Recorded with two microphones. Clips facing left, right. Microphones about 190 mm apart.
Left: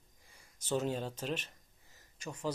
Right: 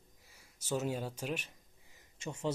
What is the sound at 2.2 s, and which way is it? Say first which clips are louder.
Speech: right 1 dB; 25° right (ahead or behind).